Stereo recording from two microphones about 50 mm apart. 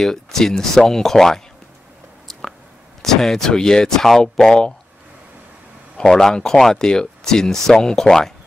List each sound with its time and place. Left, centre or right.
0.0 s speech: centre
3.0 s speech: centre
5.9 s speech: centre